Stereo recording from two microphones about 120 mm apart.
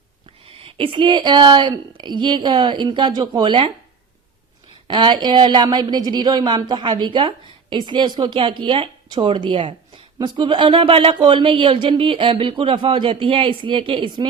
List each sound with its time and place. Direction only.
0.4 s speech: 50° right (ahead or behind)
4.9 s speech: 40° right (ahead or behind)